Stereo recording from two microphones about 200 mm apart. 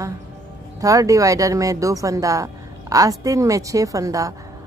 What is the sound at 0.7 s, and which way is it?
Speech, 15° right (ahead or behind).